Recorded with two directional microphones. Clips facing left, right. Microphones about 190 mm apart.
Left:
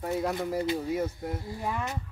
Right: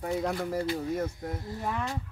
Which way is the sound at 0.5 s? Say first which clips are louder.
Left 1 dB; 15° left (ahead or behind).